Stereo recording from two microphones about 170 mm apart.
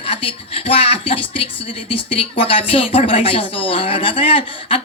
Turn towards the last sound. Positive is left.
turn(degrees=30)  # may be behind; listen again after turning